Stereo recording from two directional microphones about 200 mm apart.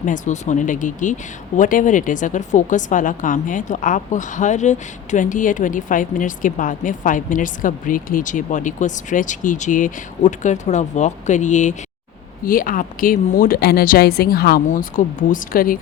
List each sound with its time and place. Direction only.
0.0 s speech: 40° left (ahead or behind)